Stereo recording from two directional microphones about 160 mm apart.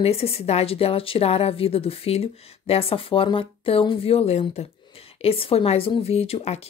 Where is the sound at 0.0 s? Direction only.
40° left (ahead or behind).